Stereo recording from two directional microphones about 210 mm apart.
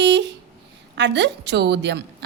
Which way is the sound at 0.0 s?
55° right (ahead or behind).